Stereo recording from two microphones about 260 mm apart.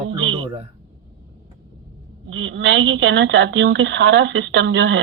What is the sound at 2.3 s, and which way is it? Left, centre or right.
Speech, right.